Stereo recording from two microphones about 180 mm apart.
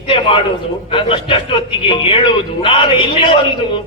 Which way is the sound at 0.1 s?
30° left (ahead or behind).